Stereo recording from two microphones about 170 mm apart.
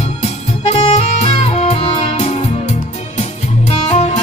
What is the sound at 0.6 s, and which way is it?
Music, 40° left (ahead or behind).